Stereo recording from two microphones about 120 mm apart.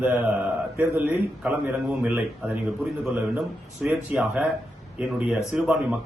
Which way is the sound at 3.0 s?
5° right (ahead or behind).